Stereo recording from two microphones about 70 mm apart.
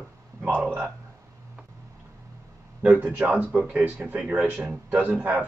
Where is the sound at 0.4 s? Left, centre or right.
Right.